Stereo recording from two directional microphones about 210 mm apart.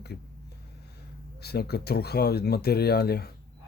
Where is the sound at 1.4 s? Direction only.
50° left (ahead or behind).